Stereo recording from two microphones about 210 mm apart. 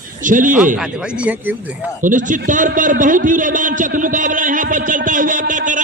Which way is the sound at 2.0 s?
40° right (ahead or behind).